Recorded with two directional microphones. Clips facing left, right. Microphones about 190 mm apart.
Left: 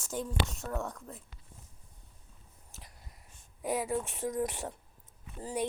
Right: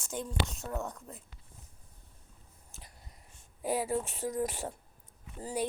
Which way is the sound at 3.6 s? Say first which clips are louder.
Right 1 dB; 30° right (ahead or behind).